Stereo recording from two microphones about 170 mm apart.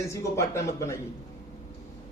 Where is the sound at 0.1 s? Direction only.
15° left (ahead or behind).